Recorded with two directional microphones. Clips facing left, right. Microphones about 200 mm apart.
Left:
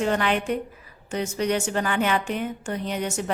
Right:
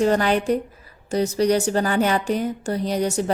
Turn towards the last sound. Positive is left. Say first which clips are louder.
# right 6 dB
turn(degrees=-35)  # may be behind; listen again after turning